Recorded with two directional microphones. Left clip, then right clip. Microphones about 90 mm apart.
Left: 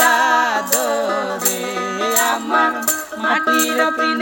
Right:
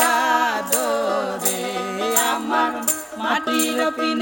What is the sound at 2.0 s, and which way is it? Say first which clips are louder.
Music: left 3 dB; 35° right (ahead or behind).